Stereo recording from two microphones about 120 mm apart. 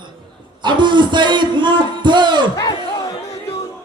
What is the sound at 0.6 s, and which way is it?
A man's voice, 40° right (ahead or behind).